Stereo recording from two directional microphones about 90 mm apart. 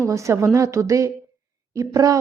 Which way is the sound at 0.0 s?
35° right (ahead or behind).